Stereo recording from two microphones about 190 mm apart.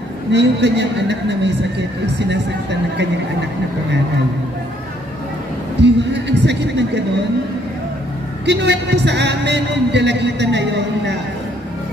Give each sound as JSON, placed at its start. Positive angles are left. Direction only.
{"t": 0.3, "sound": "music", "side_deg": -65}
{"t": 2.1, "sound": "a woman's voice", "side_deg": -65}
{"t": 5.8, "sound": "speech", "side_deg": -65}
{"t": 8.5, "sound": "music", "side_deg": -65}